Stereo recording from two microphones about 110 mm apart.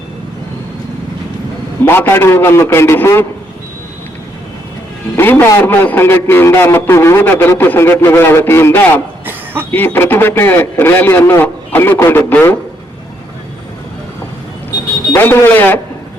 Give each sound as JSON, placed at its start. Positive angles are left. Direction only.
{"t": 1.8, "sound": "a man's voice", "side_deg": 20}
{"t": 5.1, "sound": "a man's voice", "side_deg": 20}
{"t": 9.2, "sound": "a sound", "side_deg": -20}
{"t": 9.7, "sound": "a man's voice", "side_deg": 20}
{"t": 15.1, "sound": "speech", "side_deg": 20}